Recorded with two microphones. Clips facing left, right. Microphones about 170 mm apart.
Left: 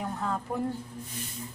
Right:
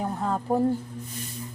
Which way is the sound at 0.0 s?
35° right (ahead or behind).